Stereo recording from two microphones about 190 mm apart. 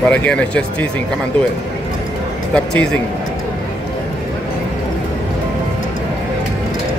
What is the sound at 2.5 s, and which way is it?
Speech, 5° left (ahead or behind).